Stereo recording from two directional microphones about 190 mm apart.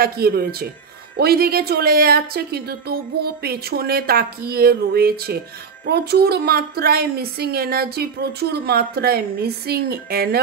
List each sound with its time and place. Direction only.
0.0 s a woman's voice: 55° right (ahead or behind)